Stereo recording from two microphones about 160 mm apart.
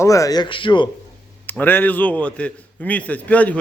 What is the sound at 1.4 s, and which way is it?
A man's voice, 10° left (ahead or behind).